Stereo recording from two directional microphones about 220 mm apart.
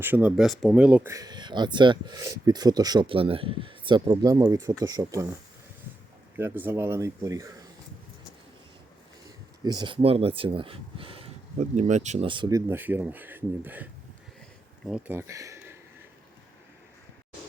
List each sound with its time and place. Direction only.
0.0 s speech: 5° right (ahead or behind)
6.3 s speech: 10° right (ahead or behind)
9.6 s speech: 20° right (ahead or behind)
14.8 s speech: 5° right (ahead or behind)